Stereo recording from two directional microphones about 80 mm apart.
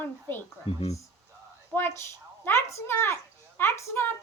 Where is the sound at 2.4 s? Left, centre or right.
Left.